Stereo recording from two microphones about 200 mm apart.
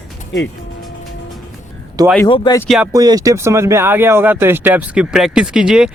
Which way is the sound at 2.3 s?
20° left (ahead or behind).